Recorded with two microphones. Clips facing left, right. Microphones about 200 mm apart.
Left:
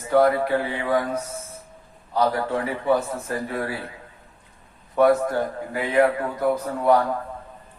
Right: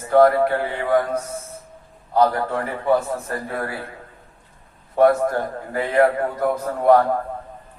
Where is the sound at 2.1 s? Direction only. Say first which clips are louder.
Right 3 dB; 50° right (ahead or behind).